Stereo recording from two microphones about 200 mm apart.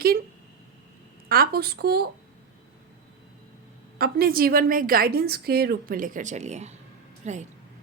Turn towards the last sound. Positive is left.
turn(degrees=-35)  # may be behind; listen again after turning